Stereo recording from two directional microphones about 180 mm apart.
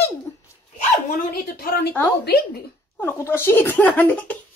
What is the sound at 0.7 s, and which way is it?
Dog, 55° left (ahead or behind).